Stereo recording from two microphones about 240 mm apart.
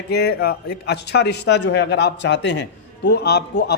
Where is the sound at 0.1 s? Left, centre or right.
Left.